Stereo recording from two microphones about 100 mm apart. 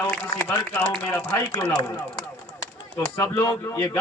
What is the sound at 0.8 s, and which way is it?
Speech, 20° left (ahead or behind).